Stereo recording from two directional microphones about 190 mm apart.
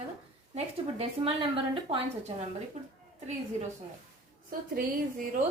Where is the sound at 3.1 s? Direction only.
40° right (ahead or behind).